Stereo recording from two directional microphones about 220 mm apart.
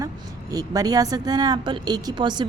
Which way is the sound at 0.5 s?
15° right (ahead or behind).